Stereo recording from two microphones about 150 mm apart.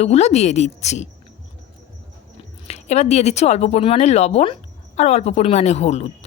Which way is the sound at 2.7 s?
45° left (ahead or behind).